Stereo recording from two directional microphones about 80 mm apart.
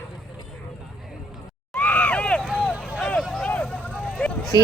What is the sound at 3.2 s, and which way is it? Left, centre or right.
Vehicle, centre.